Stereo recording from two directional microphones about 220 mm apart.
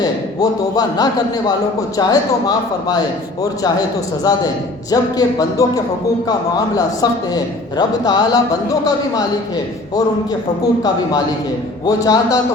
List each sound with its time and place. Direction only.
0.0 s a man's voice: 15° left (ahead or behind)
11.9 s a man's voice: 15° left (ahead or behind)